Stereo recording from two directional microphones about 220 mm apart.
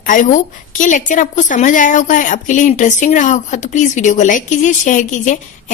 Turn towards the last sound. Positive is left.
turn(degrees=35)  # may be behind; listen again after turning